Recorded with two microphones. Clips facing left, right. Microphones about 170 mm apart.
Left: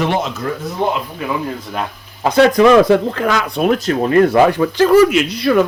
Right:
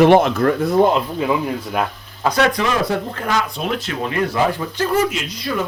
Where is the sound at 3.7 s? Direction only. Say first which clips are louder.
Left 9 dB; 45° left (ahead or behind).